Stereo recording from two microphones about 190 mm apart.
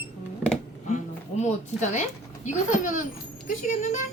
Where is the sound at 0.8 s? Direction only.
40° left (ahead or behind).